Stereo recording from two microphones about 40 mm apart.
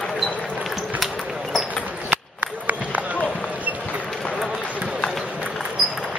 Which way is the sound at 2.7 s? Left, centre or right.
Right.